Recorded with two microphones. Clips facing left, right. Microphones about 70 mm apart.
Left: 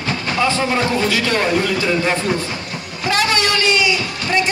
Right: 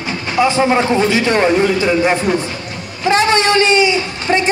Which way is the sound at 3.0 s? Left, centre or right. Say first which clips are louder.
Right 5 dB; right.